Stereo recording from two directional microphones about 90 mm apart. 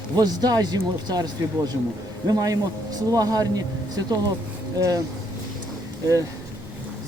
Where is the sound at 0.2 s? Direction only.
45° right (ahead or behind).